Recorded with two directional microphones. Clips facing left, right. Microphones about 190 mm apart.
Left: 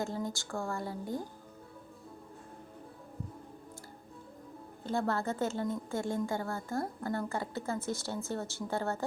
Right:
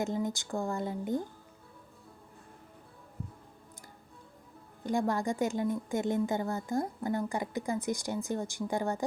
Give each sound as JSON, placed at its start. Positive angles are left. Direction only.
{"t": 0.0, "sound": "speech", "side_deg": -20}
{"t": 4.8, "sound": "speech", "side_deg": -15}